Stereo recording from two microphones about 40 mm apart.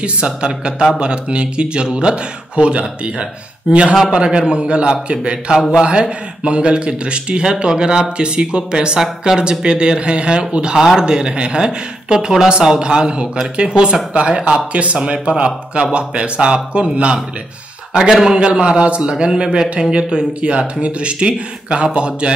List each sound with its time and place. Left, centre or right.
0.0 s a man's voice: right
18.1 s a man's voice: centre
18.4 s a man's voice: right